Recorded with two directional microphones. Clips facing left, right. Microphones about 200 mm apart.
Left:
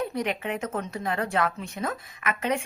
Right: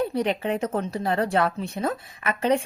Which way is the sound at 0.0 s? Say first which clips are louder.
Right 4 dB; 35° right (ahead or behind).